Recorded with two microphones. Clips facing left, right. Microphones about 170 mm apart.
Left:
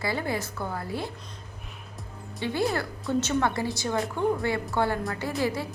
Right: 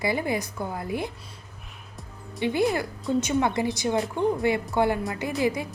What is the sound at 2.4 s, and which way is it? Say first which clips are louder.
A woman's voice: right 3 dB; 15° right (ahead or behind).